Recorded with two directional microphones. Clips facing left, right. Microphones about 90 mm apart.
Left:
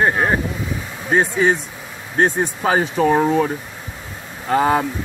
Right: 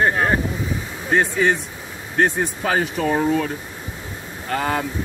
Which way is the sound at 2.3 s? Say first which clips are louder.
Left 3 dB; 30° left (ahead or behind).